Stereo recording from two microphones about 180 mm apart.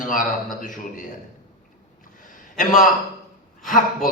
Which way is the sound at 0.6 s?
50° left (ahead or behind).